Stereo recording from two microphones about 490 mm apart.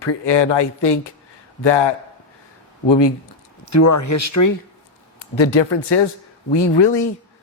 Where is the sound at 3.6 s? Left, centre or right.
Left.